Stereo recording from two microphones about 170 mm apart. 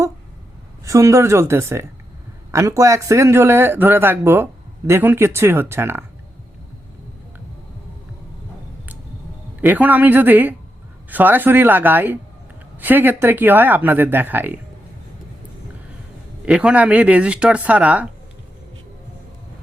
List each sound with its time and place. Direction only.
0.9 s speech: 15° right (ahead or behind)
9.6 s speech: 10° right (ahead or behind)
16.5 s speech: 5° right (ahead or behind)